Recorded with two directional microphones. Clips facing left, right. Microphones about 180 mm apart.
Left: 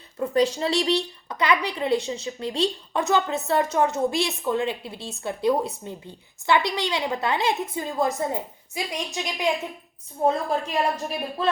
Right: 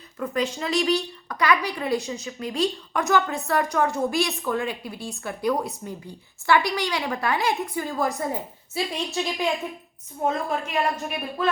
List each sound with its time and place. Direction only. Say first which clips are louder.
0.2 s a woman's voice: left 5 dB; 30° left (ahead or behind)
0.9 s a woman's voice: even; 20° left (ahead or behind)
10.2 s a woman's voice: left 3 dB; 35° left (ahead or behind)
10.8 s a woman's voice: right 2 dB; centre (ahead or behind)
11.4 s a woman's voice: even; 35° left (ahead or behind)